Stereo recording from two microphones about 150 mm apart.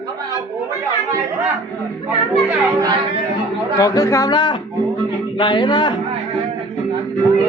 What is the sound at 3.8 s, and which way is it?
A man's voice, 25° left (ahead or behind).